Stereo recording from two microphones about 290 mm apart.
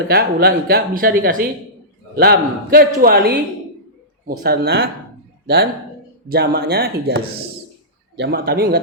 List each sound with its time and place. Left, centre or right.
0.1 s a woman's voice: right
6.2 s a woman's voice: right